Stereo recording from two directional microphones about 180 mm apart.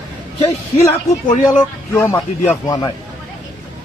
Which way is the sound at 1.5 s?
10° left (ahead or behind).